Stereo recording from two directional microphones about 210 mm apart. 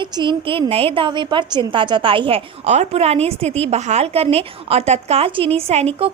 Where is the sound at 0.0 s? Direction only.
25° right (ahead or behind).